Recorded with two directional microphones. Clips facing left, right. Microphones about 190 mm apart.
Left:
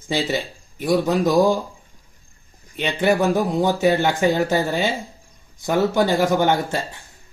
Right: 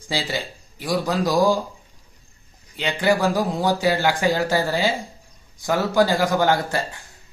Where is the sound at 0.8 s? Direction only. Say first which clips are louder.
Left 4 dB; 20° left (ahead or behind).